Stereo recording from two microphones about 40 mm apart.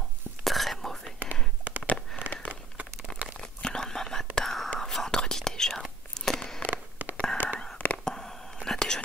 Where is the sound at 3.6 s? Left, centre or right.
Centre.